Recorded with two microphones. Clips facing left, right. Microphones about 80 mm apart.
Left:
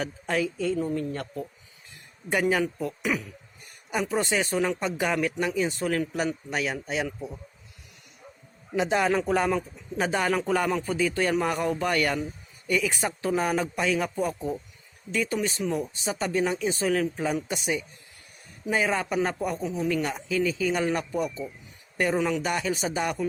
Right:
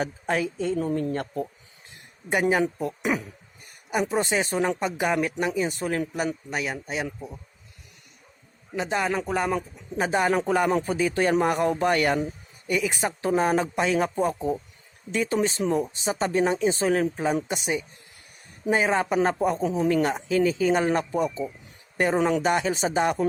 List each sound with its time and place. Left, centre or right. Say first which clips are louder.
0.0 s speech: right 2 dB; right
2.3 s speech: right 2 dB; right
3.8 s speech: right 2 dB; centre
4.8 s a man's voice: right 2 dB; centre
8.7 s a man's voice: left 2 dB; centre
9.5 s speech: even; centre